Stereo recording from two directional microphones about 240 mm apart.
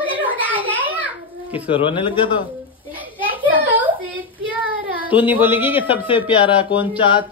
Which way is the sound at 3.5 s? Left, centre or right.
Centre.